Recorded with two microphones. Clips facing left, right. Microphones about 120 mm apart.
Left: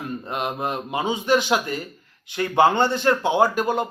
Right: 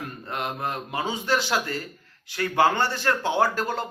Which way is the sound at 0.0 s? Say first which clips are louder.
Left 4 dB; 20° left (ahead or behind).